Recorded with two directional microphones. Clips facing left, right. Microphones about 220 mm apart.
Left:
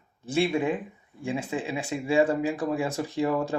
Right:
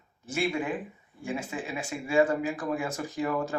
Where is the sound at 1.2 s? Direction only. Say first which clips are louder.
Left 4 dB; 30° left (ahead or behind).